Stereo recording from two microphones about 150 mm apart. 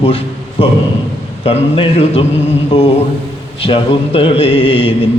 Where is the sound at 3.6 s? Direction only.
35° left (ahead or behind).